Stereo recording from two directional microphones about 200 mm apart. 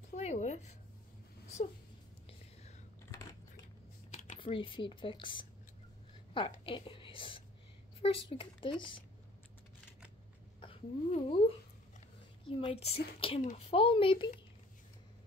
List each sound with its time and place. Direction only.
0.1 s a sound: 35° left (ahead or behind)
4.4 s a woman's voice: 25° left (ahead or behind)
10.6 s speech: 30° left (ahead or behind)